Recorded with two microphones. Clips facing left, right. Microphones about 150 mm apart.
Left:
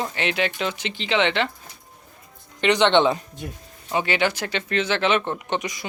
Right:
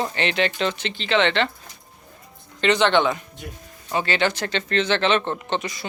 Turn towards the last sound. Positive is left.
turn(degrees=15)  # may be behind; listen again after turning